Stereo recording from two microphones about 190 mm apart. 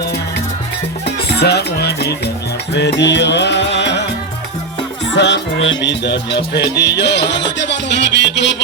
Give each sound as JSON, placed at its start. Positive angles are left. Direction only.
{"t": 1.0, "sound": "music", "side_deg": 60}
{"t": 5.1, "sound": "music", "side_deg": 65}